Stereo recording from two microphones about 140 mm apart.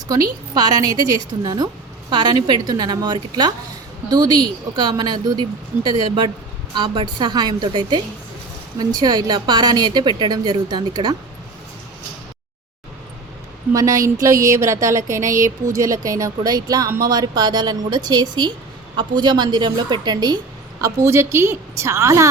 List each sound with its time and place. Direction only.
0.1 s speech: 30° right (ahead or behind)
13.7 s speech: 25° right (ahead or behind)
20.8 s speech: 20° right (ahead or behind)